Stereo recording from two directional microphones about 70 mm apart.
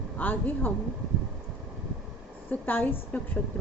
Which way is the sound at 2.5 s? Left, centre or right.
Left.